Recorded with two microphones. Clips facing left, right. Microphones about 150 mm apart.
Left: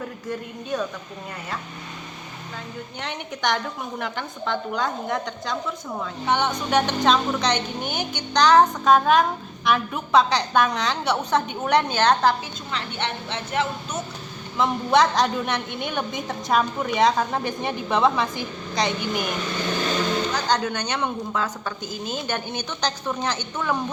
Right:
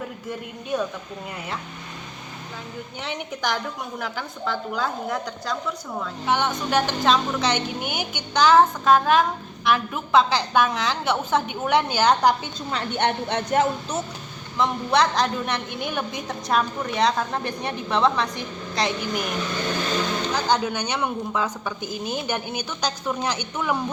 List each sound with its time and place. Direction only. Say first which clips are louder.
0.3 s a woman's voice: even; 10° right (ahead or behind)
3.0 s a woman's voice: left 1 dB; 5° right (ahead or behind)
12.7 s a woman's voice: right 5 dB; 50° right (ahead or behind)
14.6 s a woman's voice: left 2 dB; centre (ahead or behind)
20.3 s a woman's voice: right 1 dB; 10° right (ahead or behind)